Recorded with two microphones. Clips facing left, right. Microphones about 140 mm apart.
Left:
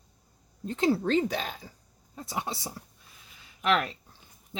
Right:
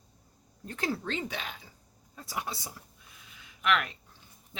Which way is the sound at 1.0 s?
40° left (ahead or behind).